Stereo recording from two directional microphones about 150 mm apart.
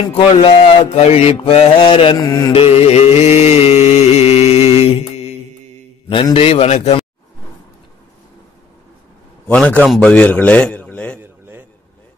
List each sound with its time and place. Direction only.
0.1 s mantra: 40° left (ahead or behind)
2.5 s mantra: 40° left (ahead or behind)
6.3 s mantra: 40° left (ahead or behind)
9.5 s a man's voice: 10° left (ahead or behind)